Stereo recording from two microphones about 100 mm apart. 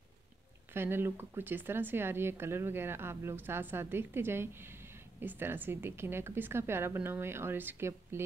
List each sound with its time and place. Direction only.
0.7 s speech: 25° right (ahead or behind)